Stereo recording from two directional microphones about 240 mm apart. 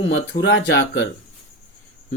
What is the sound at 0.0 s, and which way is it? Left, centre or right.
Speech, left.